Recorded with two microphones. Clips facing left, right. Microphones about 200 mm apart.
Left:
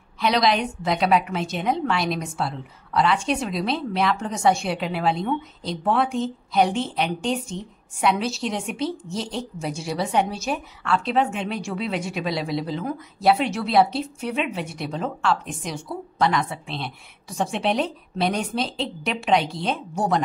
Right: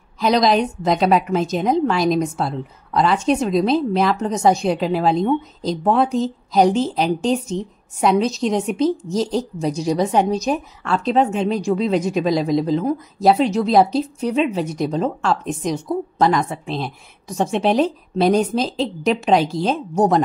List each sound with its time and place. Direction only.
0.2 s a woman's voice: 40° right (ahead or behind)